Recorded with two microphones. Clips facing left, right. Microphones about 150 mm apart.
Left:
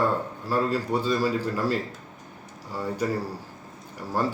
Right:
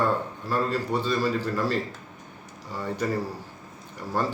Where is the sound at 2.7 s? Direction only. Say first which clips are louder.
Left 2 dB; 10° left (ahead or behind).